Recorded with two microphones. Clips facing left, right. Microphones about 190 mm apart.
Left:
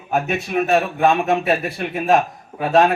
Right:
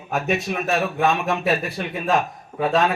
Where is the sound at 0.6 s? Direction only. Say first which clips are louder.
Left 4 dB; 55° left (ahead or behind).